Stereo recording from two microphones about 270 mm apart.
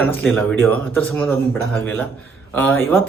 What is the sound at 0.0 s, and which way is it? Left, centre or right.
A man's voice, centre.